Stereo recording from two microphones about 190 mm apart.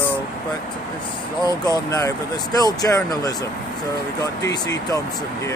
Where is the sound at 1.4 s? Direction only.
20° left (ahead or behind).